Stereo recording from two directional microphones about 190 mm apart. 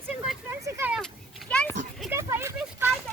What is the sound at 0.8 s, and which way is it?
Speech, 5° right (ahead or behind).